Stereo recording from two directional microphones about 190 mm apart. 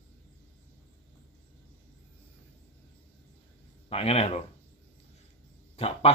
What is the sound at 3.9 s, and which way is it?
Speech, 30° left (ahead or behind).